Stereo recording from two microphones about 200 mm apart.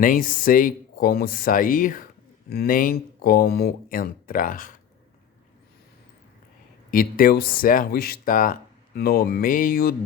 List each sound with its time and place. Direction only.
0.0 s speech: 45° left (ahead or behind)
6.9 s speech: 45° left (ahead or behind)